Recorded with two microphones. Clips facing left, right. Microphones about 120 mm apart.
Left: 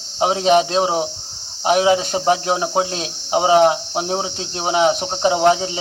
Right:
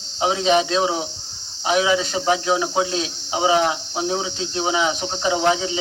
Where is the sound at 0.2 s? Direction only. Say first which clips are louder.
Left 3 dB; 45° left (ahead or behind).